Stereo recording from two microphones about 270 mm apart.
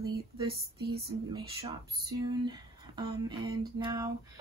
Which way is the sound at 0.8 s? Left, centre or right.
Right.